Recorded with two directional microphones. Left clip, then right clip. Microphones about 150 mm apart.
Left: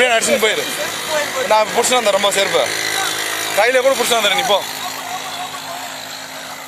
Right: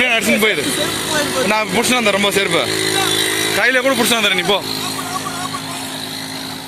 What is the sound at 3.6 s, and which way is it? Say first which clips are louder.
Speech: left 2 dB; 10° left (ahead or behind).